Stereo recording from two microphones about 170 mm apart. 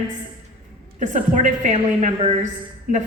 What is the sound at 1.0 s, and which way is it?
A woman's voice, 45° right (ahead or behind).